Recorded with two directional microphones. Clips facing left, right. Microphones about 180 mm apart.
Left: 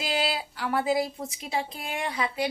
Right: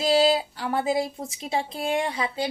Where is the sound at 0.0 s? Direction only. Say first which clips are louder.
Right 9 dB; 30° right (ahead or behind).